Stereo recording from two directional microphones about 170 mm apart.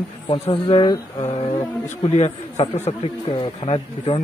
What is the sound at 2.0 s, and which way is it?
A man's voice, 35° left (ahead or behind).